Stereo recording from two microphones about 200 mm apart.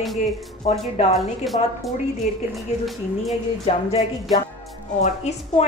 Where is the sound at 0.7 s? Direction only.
30° left (ahead or behind).